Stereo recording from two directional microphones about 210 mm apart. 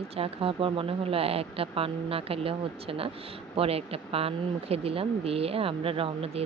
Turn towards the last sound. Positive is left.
turn(degrees=-25)  # may be behind; listen again after turning